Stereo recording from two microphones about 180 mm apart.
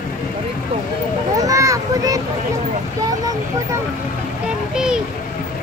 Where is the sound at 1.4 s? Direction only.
20° right (ahead or behind).